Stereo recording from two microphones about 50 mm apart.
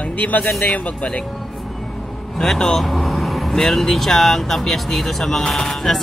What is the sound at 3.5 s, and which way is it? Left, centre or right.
Speech, centre.